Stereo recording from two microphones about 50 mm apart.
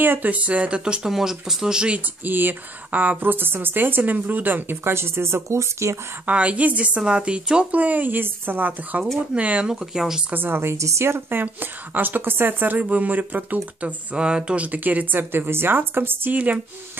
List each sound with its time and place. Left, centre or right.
0.0 s a woman's voice: right
0.3 s speech: right
2.2 s a woman's voice: right
6.2 s speech: right
7.7 s speech: right
9.3 s speech: right
9.7 s speech: centre
10.3 s a woman's voice: right
10.6 s a woman's voice: right
14.1 s speech: centre
14.7 s a woman's voice: right